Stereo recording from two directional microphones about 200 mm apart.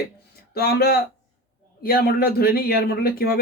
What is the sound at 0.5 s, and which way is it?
Speech, 50° left (ahead or behind).